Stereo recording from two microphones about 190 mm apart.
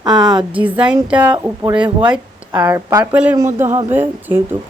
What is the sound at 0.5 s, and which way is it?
Speech, 10° right (ahead or behind).